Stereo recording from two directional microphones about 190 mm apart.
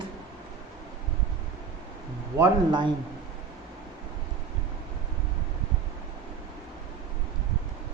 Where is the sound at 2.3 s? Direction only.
20° right (ahead or behind).